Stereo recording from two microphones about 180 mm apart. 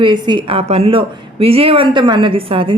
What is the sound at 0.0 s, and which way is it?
Speech, 25° right (ahead or behind).